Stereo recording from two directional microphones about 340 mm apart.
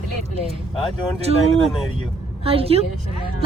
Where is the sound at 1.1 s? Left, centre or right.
Centre.